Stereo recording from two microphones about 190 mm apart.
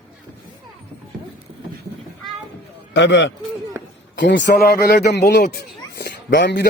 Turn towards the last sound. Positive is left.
turn(degrees=65)  # may be behind; listen again after turning